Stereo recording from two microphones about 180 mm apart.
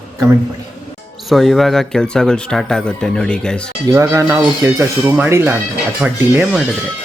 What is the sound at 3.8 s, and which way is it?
Speech, 15° right (ahead or behind).